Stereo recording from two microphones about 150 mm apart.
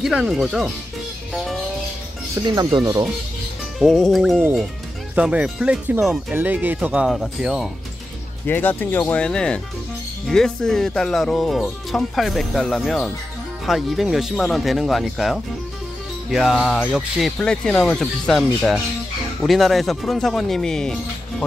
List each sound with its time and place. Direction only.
0.0 s speech: 5° right (ahead or behind)
1.3 s music: centre (ahead or behind)
2.3 s speech: 25° right (ahead or behind)
3.8 s speech: centre (ahead or behind)
8.5 s speech: 10° left (ahead or behind)